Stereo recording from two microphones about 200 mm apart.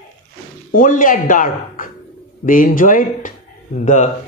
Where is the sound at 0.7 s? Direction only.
45° left (ahead or behind).